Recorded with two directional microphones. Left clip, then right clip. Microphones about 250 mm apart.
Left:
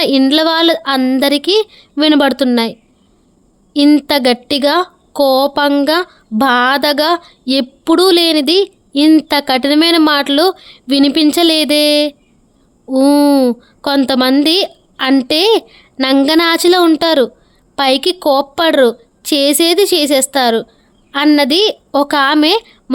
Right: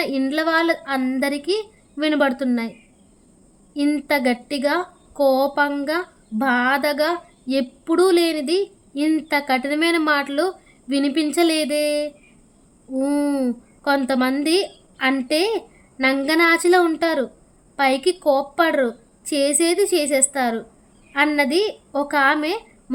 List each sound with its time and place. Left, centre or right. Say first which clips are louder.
0.0 s a woman's voice: left 10 dB; left
3.8 s a woman's voice: left 10 dB; left